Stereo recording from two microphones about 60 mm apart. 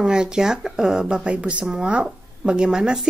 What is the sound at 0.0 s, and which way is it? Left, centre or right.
Speech, centre.